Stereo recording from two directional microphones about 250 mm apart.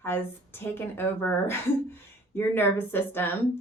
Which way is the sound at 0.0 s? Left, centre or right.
Centre.